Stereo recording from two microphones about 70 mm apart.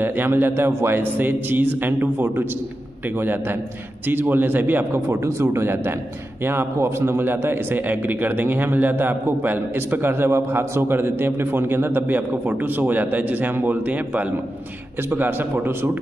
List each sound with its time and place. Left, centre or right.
0.0 s a man's voice: right